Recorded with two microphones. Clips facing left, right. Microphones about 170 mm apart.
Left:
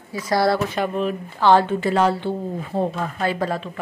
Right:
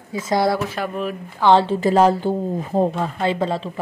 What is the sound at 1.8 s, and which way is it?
Speech, 40° right (ahead or behind).